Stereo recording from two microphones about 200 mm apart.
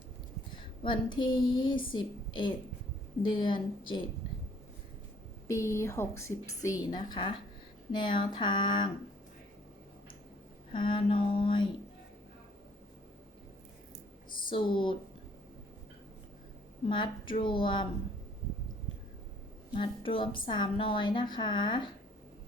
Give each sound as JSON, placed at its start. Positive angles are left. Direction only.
{"t": 0.8, "sound": "a woman's voice", "side_deg": 25}
{"t": 5.5, "sound": "a woman's voice", "side_deg": 15}
{"t": 10.7, "sound": "a woman's voice", "side_deg": 25}
{"t": 14.5, "sound": "a woman's voice", "side_deg": 25}
{"t": 16.9, "sound": "a woman's voice", "side_deg": 25}
{"t": 19.7, "sound": "a woman's voice", "side_deg": 25}